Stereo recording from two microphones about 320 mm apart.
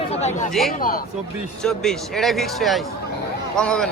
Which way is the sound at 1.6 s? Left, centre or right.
Centre.